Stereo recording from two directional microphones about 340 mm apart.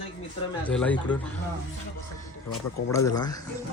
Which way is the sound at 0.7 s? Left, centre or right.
Centre.